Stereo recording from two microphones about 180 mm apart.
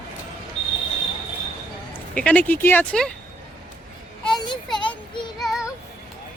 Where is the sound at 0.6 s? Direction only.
30° left (ahead or behind).